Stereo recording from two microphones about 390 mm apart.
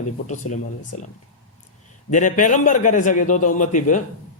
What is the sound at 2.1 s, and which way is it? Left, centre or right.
Speech, centre.